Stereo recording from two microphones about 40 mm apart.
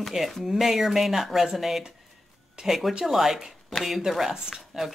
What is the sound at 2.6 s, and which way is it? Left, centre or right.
Speech, centre.